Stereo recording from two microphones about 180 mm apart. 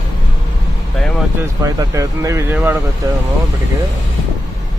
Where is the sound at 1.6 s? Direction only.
15° right (ahead or behind).